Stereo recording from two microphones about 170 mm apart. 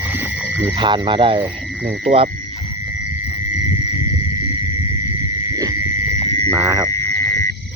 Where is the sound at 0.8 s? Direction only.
30° right (ahead or behind).